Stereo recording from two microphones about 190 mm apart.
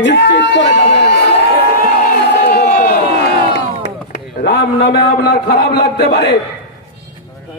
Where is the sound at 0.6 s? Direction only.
35° left (ahead or behind).